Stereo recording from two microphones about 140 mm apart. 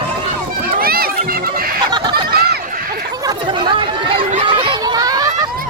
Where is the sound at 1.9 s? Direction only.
35° right (ahead or behind).